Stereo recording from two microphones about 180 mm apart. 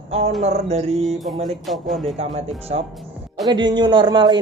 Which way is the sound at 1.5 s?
Centre (ahead or behind).